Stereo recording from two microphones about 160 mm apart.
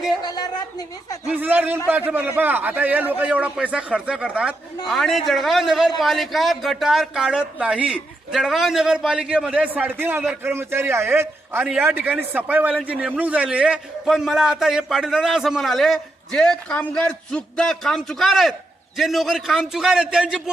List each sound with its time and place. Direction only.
0.2 s speech: 25° left (ahead or behind)
1.3 s a man's voice: 10° right (ahead or behind)